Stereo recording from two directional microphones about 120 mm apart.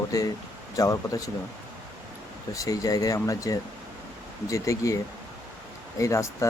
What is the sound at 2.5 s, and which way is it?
Speech, 30° left (ahead or behind).